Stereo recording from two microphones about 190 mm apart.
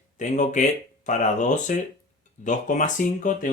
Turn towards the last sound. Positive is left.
turn(degrees=45)  # may be behind; listen again after turning